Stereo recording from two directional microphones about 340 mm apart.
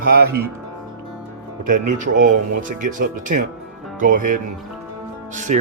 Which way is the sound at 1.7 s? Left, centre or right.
Right.